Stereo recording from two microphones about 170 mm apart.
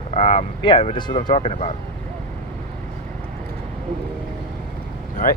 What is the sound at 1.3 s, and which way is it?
Speech, 40° left (ahead or behind).